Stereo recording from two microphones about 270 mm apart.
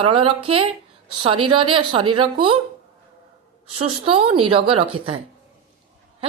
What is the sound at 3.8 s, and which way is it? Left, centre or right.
A woman's voice, centre.